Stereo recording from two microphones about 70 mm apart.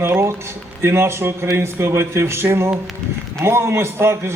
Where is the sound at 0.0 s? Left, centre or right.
Right.